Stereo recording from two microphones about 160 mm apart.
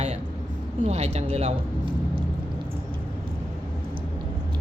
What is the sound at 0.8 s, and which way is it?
Speech, 45° right (ahead or behind).